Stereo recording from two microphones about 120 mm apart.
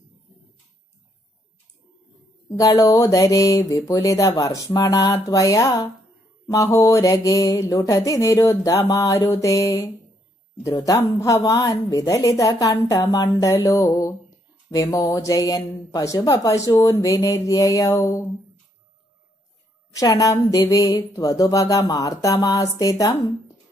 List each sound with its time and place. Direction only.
2.5 s speech: 30° left (ahead or behind)
19.9 s speech: 30° left (ahead or behind)